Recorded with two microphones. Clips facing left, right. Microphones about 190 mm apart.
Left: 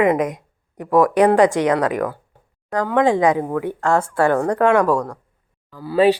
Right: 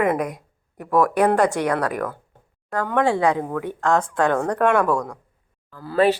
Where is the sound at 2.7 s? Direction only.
15° left (ahead or behind).